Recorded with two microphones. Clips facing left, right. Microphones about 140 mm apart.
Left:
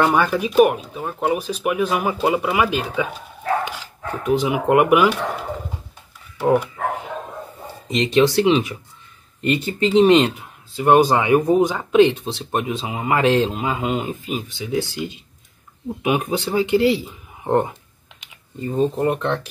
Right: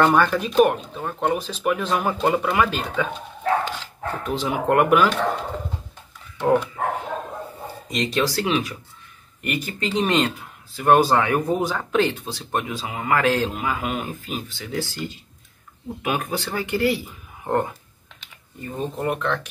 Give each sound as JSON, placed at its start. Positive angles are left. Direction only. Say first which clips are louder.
{"t": 0.0, "sound": "speech", "louder": "even", "side_deg": 10}
{"t": 6.3, "sound": "speech", "louder": "left 2 dB", "side_deg": 5}
{"t": 7.9, "sound": "speech", "louder": "left 7 dB", "side_deg": 25}